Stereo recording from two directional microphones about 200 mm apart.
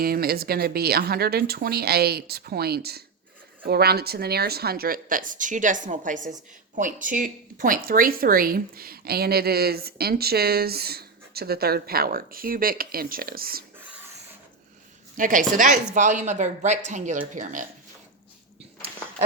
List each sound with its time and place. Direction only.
0.0 s speech: 50° right (ahead or behind)
15.1 s speech: 40° right (ahead or behind)